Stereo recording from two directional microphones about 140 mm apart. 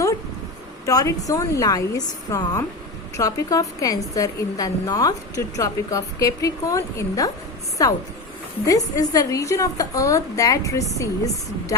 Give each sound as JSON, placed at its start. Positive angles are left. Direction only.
{"t": 0.9, "sound": "a woman's voice", "side_deg": 25}